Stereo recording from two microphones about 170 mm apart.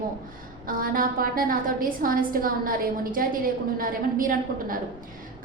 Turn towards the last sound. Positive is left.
turn(degrees=-55)  # may be behind; listen again after turning